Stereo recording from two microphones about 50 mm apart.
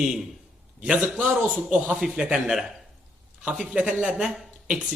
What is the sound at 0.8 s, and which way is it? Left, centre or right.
A man's voice, right.